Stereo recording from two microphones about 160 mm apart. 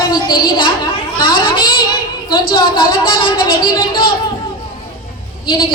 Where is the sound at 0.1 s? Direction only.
25° left (ahead or behind).